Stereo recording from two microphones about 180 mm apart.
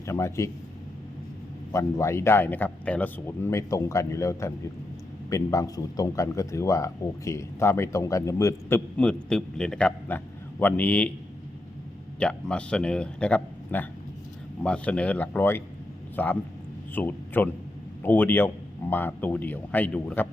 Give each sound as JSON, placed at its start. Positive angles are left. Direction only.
{"t": 0.0, "sound": "speech", "side_deg": 15}
{"t": 1.7, "sound": "speech", "side_deg": 15}
{"t": 12.2, "sound": "a man's voice", "side_deg": 5}